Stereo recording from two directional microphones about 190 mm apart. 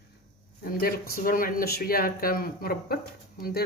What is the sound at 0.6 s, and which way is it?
Speech, 50° left (ahead or behind).